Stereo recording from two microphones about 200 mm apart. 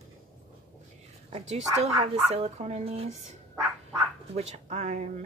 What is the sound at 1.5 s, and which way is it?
A woman's voice, 35° right (ahead or behind).